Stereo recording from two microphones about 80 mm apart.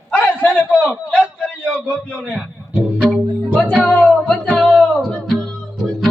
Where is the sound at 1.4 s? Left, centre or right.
Centre.